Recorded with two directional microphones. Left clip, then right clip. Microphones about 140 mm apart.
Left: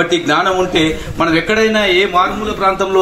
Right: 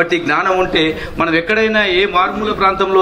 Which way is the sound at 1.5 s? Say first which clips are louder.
Left 1 dB; 40° left (ahead or behind).